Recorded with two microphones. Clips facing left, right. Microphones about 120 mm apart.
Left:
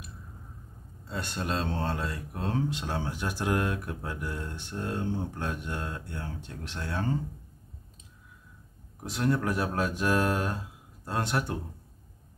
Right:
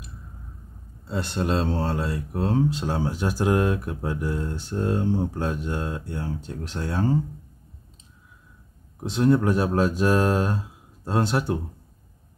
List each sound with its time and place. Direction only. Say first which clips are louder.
1.0 s speech: right 7 dB; 30° right (ahead or behind)
9.0 s speech: right 8 dB; 25° right (ahead or behind)